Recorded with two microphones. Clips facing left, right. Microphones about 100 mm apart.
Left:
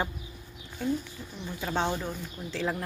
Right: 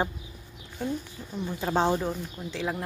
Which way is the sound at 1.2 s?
30° right (ahead or behind).